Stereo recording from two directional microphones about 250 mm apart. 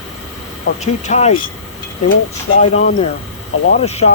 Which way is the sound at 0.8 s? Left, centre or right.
Left.